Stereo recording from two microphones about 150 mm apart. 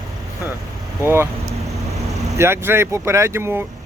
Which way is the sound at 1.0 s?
15° right (ahead or behind).